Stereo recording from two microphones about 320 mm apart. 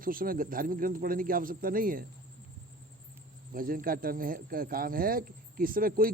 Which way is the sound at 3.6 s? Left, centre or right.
Right.